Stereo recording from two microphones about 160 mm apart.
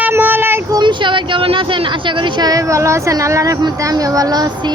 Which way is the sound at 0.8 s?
30° right (ahead or behind).